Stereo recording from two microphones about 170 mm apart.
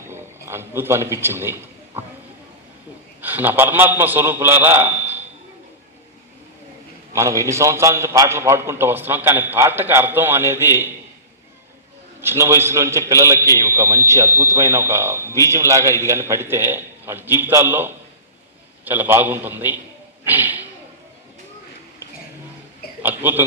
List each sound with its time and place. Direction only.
0.1 s a man's voice: 15° right (ahead or behind)
3.2 s a man's voice: 10° right (ahead or behind)
7.1 s speech: 20° right (ahead or behind)
12.2 s speech: 15° right (ahead or behind)
20.2 s whip: 10° right (ahead or behind)
23.0 s speech: 10° right (ahead or behind)